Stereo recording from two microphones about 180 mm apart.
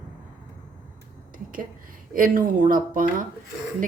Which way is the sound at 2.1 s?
50° right (ahead or behind).